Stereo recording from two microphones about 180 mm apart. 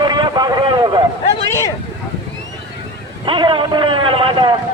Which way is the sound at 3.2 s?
25° right (ahead or behind).